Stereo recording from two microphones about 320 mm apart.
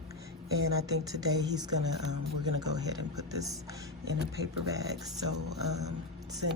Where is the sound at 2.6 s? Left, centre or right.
Centre.